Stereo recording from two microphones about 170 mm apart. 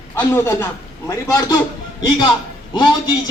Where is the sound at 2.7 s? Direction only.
25° left (ahead or behind).